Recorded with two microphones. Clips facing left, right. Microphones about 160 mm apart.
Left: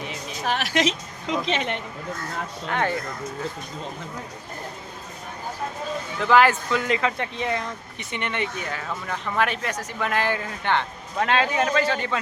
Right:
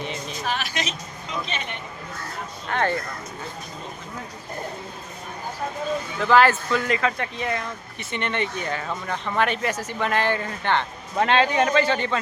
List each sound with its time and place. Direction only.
0.4 s a woman's voice: 70° left (ahead or behind); by 1.8 s 90° left
2.6 s speech: 10° left (ahead or behind)
6.2 s speech: 15° left (ahead or behind)